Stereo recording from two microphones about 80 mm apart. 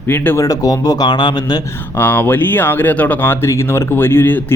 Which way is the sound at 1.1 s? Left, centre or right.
Left.